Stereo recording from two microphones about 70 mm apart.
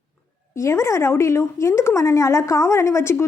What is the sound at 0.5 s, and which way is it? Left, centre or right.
A woman's voice, left.